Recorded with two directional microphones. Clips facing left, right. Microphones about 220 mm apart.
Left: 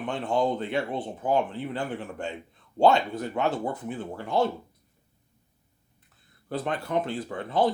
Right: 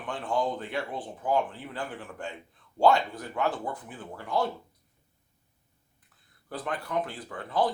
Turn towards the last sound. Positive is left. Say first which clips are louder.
# left 3 dB
turn(degrees=25)  # may be behind; listen again after turning